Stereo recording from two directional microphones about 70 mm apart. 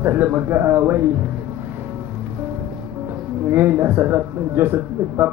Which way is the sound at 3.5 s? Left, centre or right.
Right.